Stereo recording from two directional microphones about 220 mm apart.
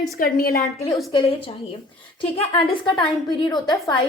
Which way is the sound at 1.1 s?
25° left (ahead or behind).